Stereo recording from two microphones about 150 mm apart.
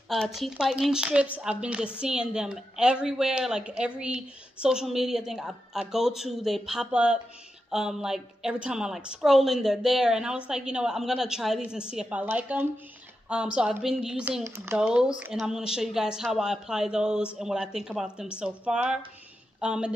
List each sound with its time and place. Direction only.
0.1 s a woman's voice: centre (ahead or behind)
14.4 s speech: 15° right (ahead or behind)
14.8 s a woman's voice: 5° right (ahead or behind)